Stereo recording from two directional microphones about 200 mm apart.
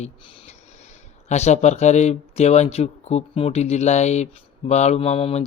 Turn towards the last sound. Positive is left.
turn(degrees=30)  # may be behind; listen again after turning